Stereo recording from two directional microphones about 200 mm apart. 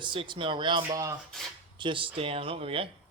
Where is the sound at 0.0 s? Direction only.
25° right (ahead or behind).